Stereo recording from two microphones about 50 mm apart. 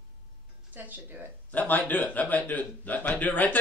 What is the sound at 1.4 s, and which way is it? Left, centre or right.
A man's voice, left.